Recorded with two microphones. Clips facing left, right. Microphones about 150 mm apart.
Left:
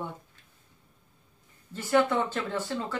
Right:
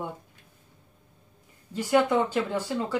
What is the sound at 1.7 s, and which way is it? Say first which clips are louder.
Speech: right 2 dB; 15° right (ahead or behind).